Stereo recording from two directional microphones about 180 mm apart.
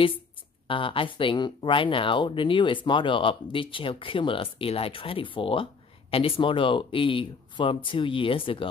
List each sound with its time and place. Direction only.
0.7 s speech: 30° left (ahead or behind)